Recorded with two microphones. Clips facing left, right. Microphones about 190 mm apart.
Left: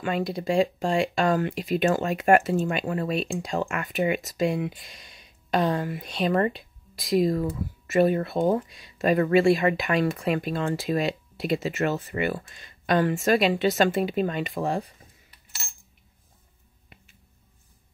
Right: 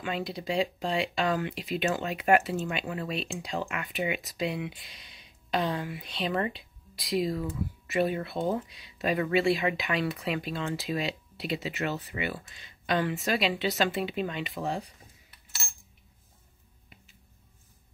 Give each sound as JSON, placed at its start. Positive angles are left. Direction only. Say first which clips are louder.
{"t": 0.0, "sound": "speech", "louder": "left 6 dB", "side_deg": 45}